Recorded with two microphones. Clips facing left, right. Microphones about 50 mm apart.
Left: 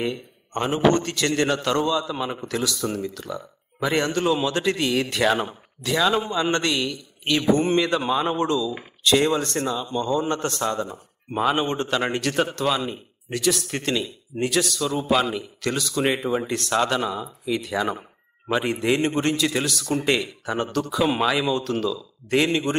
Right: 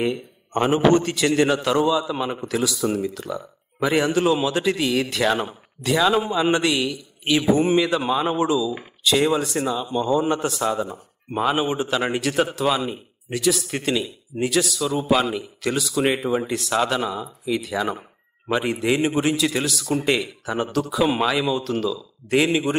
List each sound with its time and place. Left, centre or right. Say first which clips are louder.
0.0 s a man's voice: right 3 dB; centre